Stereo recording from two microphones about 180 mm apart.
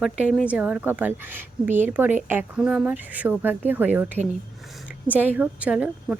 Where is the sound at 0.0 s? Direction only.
Centre (ahead or behind).